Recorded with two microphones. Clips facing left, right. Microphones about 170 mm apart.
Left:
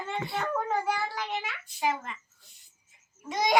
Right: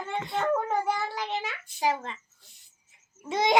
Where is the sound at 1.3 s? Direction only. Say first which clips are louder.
Right 2 dB; 35° right (ahead or behind).